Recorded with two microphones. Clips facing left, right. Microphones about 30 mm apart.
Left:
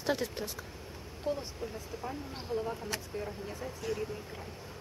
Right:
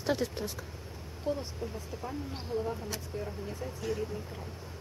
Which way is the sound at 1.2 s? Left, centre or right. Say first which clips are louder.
Right 1 dB; centre.